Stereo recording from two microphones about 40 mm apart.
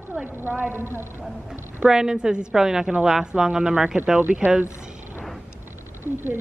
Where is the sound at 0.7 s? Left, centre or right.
Right.